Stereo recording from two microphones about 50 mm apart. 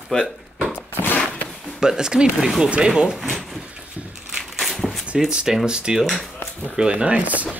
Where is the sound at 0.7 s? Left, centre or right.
Left.